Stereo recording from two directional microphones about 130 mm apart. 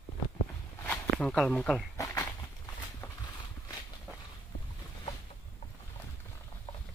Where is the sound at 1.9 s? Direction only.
25° left (ahead or behind).